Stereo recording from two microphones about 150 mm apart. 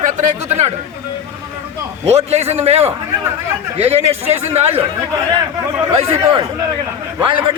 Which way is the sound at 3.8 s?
40° right (ahead or behind).